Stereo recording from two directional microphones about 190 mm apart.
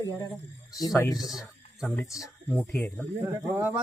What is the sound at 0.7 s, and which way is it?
Speech, 20° left (ahead or behind).